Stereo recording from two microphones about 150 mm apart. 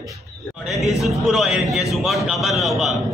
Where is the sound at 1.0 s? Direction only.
Centre (ahead or behind).